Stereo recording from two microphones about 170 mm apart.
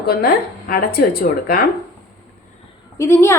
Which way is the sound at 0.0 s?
65° left (ahead or behind).